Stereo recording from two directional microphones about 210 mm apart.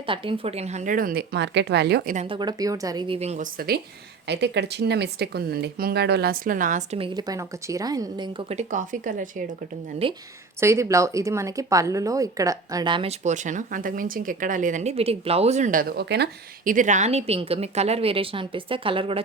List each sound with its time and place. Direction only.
0.0 s speech: 25° right (ahead or behind); by 2.1 s 50° right (ahead or behind)
2.1 s speech: 25° right (ahead or behind); by 3.8 s 40° right (ahead or behind)
4.3 s speech: 55° right (ahead or behind); by 7.1 s 30° right (ahead or behind)
7.1 s speech: 20° right (ahead or behind); by 9.4 s 40° right (ahead or behind)
10.0 s speech: 25° right (ahead or behind)
10.6 s speech: 15° right (ahead or behind)